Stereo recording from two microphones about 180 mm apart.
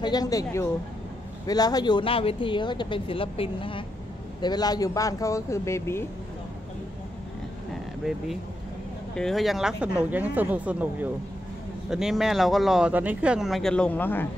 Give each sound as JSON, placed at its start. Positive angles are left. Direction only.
{"t": 0.0, "sound": "speech", "side_deg": 20}
{"t": 9.1, "sound": "speech", "side_deg": 0}